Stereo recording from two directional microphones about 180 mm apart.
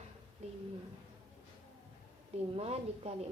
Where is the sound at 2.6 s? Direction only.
35° right (ahead or behind).